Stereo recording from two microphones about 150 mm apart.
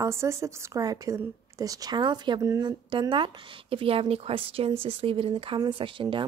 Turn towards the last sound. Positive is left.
turn(degrees=-35)  # may be behind; listen again after turning